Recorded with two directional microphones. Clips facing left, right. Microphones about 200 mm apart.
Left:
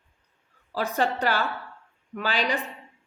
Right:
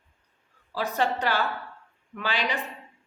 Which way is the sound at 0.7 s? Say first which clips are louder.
Left 1 dB; 45° left (ahead or behind).